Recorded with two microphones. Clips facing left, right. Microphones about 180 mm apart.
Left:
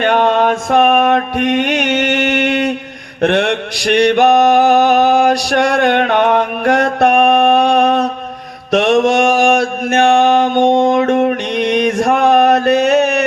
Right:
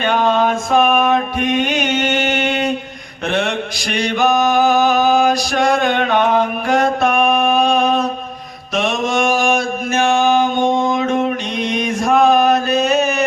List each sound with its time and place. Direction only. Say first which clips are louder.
0.0 s mantra: left 3 dB; 65° left (ahead or behind)